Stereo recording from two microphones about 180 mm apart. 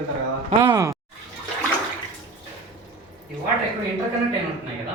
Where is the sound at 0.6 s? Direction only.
20° right (ahead or behind).